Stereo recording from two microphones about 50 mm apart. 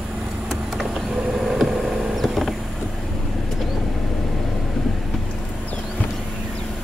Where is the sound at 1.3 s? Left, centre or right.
Centre.